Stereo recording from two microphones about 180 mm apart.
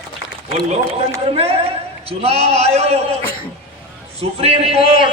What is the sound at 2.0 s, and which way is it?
Speech, 35° right (ahead or behind).